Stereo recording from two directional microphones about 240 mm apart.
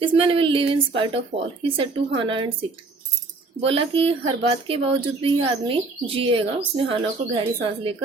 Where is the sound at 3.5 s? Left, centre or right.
Right.